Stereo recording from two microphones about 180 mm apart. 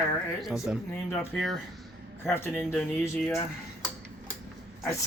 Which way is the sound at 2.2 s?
10° left (ahead or behind).